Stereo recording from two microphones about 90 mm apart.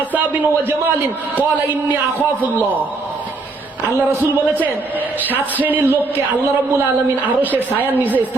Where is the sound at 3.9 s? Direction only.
20° right (ahead or behind).